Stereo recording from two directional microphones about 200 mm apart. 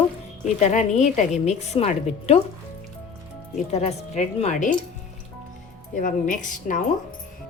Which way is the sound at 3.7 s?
35° left (ahead or behind).